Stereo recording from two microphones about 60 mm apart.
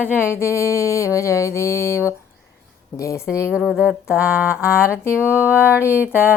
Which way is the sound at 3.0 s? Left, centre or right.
Left.